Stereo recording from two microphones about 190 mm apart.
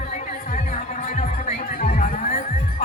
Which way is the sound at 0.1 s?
40° left (ahead or behind).